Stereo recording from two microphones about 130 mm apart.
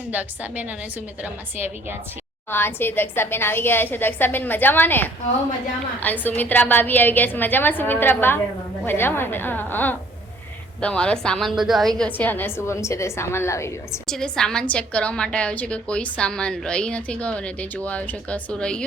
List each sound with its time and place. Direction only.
0.1 s a woman's voice: 10° right (ahead or behind)
2.5 s a woman's voice: 15° left (ahead or behind)
14.1 s a woman's voice: 5° left (ahead or behind)